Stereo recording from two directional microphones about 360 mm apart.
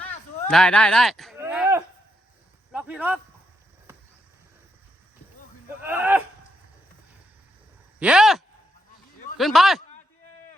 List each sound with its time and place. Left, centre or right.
0.0 s a sound: centre
5.8 s speech: centre
7.9 s speech: centre